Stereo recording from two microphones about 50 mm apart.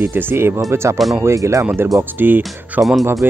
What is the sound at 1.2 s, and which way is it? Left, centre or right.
Speech, right.